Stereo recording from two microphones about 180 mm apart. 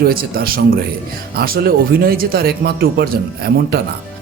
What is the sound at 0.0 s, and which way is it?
Speech, 55° right (ahead or behind).